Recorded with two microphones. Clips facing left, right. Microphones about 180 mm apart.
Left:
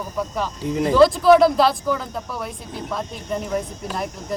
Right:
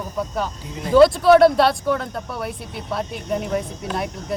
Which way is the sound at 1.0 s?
Centre (ahead or behind).